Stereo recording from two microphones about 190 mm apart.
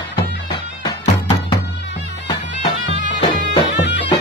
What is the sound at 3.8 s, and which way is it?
Music, 65° left (ahead or behind).